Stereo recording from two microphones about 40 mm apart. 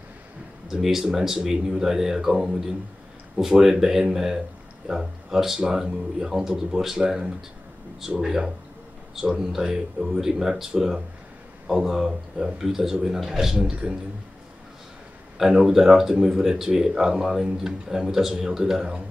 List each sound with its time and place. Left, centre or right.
0.7 s speech: centre
15.6 s speech: centre